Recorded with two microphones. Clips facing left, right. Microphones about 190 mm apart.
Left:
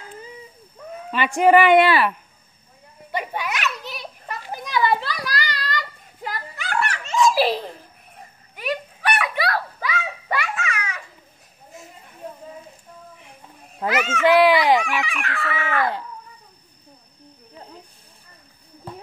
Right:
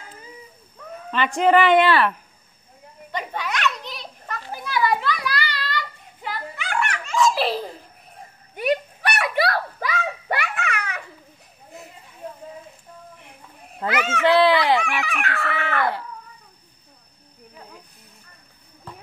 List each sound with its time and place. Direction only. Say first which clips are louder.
1.1 s speech: left 2 dB; 10° left (ahead or behind)
3.1 s children playing: left 1 dB; 10° left (ahead or behind); by 7.0 s 35° left (ahead or behind)
7.1 s giggle: left 1 dB; 15° left (ahead or behind)
7.3 s giggle: left 3 dB; centre (ahead or behind)
9.5 s children playing: even; 50° right (ahead or behind)
13.7 s speech: left 1 dB; 10° left (ahead or behind)
14.9 s chicken: even; 55° right (ahead or behind)